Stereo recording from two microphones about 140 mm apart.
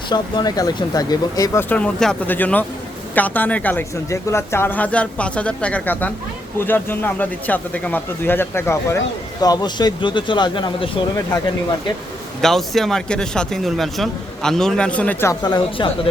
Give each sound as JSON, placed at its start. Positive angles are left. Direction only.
{"t": 0.1, "sound": "speech", "side_deg": 30}
{"t": 1.7, "sound": "speech", "side_deg": 5}
{"t": 9.4, "sound": "speech", "side_deg": 30}
{"t": 12.4, "sound": "speech", "side_deg": 0}
{"t": 15.4, "sound": "speech", "side_deg": 30}